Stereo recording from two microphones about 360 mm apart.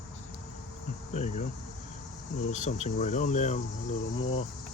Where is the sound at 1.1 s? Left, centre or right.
Centre.